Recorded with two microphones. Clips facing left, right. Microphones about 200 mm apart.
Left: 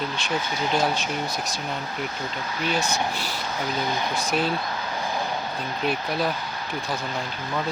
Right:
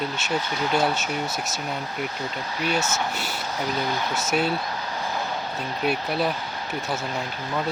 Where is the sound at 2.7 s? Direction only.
25° right (ahead or behind).